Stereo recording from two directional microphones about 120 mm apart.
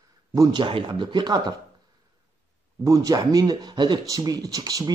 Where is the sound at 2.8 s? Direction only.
30° right (ahead or behind).